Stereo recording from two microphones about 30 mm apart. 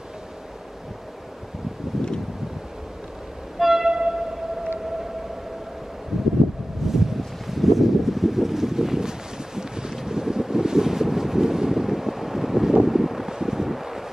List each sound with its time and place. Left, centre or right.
1.9 s wind: centre
3.5 s a sound: centre
3.8 s train: right
6.1 s a sound: centre
6.9 s wind: centre
9.6 s boat: right
9.9 s wind noise: centre
13.3 s wind: centre